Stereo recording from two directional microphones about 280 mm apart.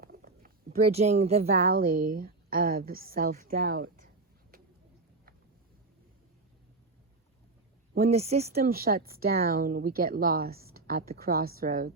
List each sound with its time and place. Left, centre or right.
0.0 s a sound: right
0.9 s a woman's voice: right
8.0 s a woman's voice: right